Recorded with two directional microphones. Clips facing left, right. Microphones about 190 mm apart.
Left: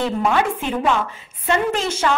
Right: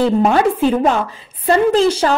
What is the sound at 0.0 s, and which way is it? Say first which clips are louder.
A woman's voice: right 6 dB; 40° right (ahead or behind).